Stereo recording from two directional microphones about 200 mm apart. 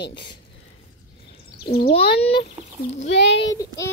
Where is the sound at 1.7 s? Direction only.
50° left (ahead or behind).